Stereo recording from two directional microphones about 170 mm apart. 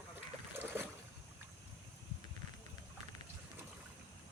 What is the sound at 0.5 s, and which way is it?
Boat, 15° right (ahead or behind).